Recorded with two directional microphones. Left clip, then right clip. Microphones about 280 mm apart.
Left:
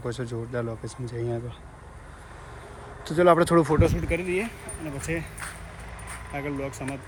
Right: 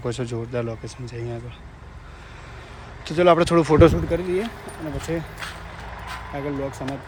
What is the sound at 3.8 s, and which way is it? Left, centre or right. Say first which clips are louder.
Speech: right 8 dB; right.